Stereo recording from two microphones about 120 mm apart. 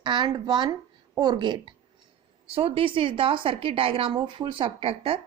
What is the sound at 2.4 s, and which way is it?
A woman's voice, 50° right (ahead or behind).